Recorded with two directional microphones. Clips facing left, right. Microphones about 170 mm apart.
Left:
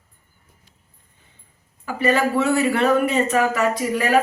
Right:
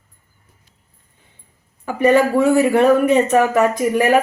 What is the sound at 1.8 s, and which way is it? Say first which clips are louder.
Speech: right 6 dB; 15° right (ahead or behind).